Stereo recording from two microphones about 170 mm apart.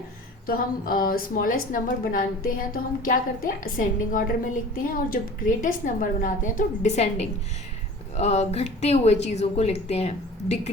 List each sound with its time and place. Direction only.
0.4 s a woman's voice: 55° left (ahead or behind); by 10.7 s 40° left (ahead or behind)